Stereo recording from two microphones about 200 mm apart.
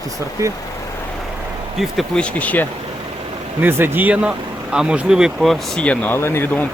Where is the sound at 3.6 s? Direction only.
10° right (ahead or behind).